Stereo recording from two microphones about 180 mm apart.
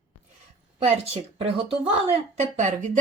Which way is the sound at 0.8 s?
35° right (ahead or behind).